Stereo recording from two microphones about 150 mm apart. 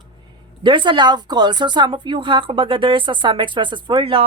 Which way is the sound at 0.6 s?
30° right (ahead or behind).